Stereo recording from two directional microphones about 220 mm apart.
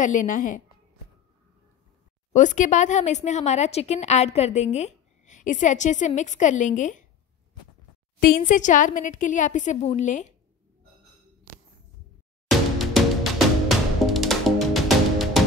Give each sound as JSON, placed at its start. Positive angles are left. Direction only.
{"t": 0.0, "sound": "speech", "side_deg": 35}
{"t": 2.3, "sound": "speech", "side_deg": 35}
{"t": 8.4, "sound": "speech", "side_deg": 35}
{"t": 12.4, "sound": "music", "side_deg": 0}